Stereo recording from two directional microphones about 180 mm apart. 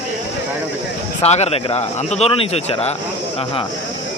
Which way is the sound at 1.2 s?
35° left (ahead or behind).